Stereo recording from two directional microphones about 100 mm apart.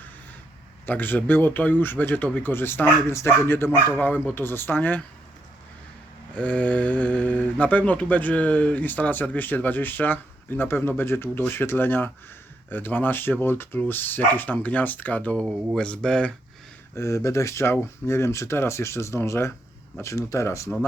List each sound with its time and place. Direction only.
0.9 s speech: 20° left (ahead or behind)
6.3 s speech: 15° left (ahead or behind)
16.9 s speech: 30° left (ahead or behind)